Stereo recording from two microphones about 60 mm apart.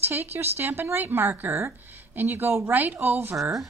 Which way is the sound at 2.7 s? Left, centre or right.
Right.